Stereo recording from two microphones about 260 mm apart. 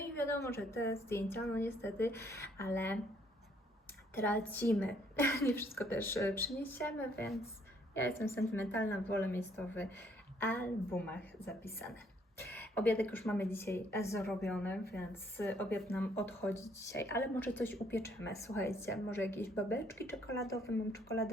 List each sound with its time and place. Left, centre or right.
0.0 s a woman's voice: centre
4.1 s speech: centre